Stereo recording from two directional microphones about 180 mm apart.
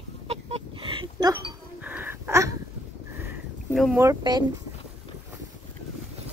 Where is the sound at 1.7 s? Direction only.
10° right (ahead or behind).